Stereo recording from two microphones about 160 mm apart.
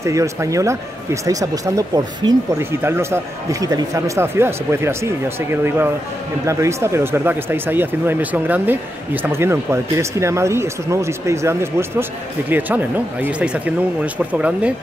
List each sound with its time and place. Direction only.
0.0 s speech: 20° right (ahead or behind)